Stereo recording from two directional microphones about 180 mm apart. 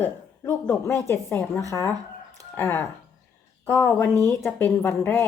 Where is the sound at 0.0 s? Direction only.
10° left (ahead or behind).